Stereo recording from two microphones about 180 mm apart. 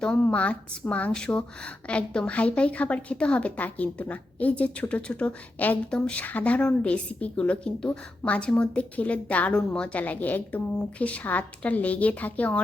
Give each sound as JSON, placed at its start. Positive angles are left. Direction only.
{"t": 0.0, "sound": "speech", "side_deg": 5}